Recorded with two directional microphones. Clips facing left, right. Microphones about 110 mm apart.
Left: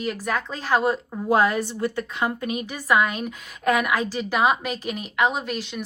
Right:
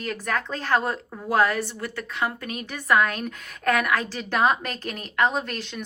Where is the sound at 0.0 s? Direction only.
10° left (ahead or behind).